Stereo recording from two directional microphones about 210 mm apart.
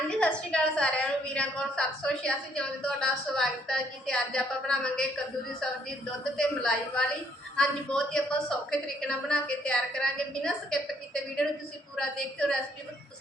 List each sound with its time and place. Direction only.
0.1 s a woman's voice: 5° left (ahead or behind)
6.3 s a woman's voice: 5° left (ahead or behind)